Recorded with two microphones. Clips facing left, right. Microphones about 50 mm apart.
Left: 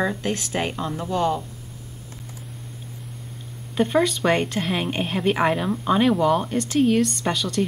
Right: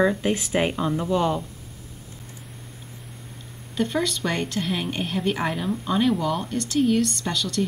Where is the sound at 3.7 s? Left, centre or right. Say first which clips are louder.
Left 4 dB; left.